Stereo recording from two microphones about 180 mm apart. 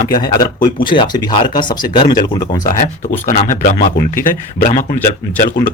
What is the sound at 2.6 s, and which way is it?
Speech, 45° left (ahead or behind).